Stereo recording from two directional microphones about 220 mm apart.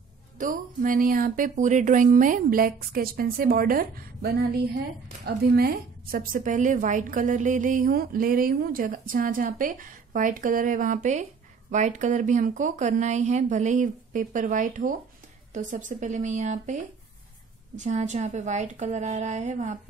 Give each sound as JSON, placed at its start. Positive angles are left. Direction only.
{"t": 0.4, "sound": "a woman's voice", "side_deg": -40}